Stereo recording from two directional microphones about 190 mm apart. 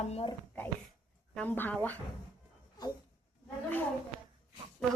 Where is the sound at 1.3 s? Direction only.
10° left (ahead or behind).